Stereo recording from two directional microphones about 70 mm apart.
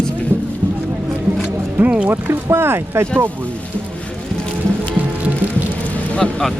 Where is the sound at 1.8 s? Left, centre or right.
Right.